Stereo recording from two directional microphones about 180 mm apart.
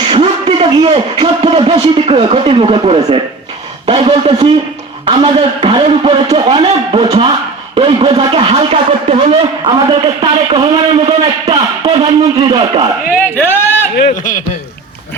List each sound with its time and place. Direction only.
0.1 s a sound: 30° right (ahead or behind)
1.7 s a man's voice: 30° right (ahead or behind)
13.3 s speech: 10° left (ahead or behind)
14.3 s a man's voice: 45° left (ahead or behind)